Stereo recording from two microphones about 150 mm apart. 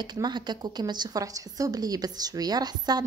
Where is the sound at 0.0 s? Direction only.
30° right (ahead or behind).